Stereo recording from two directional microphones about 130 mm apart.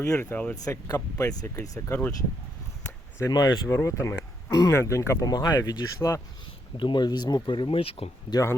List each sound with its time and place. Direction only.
0.0 s speech: 20° left (ahead or behind)
0.5 s speech: 25° left (ahead or behind)
3.2 s speech: 30° left (ahead or behind)
6.7 s speech: 35° left (ahead or behind)